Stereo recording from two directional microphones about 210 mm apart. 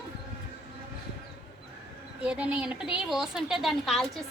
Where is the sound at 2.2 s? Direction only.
5° right (ahead or behind).